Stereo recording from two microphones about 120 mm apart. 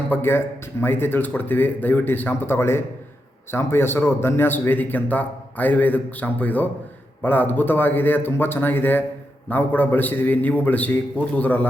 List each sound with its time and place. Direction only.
0.1 s speech: 20° left (ahead or behind)